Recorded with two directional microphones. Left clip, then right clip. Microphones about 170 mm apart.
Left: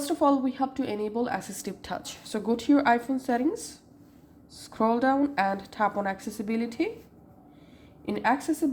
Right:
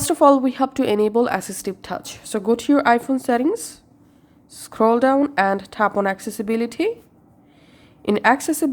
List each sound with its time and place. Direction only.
0.0 s a woman's voice: 50° right (ahead or behind)
8.0 s a woman's voice: 45° right (ahead or behind)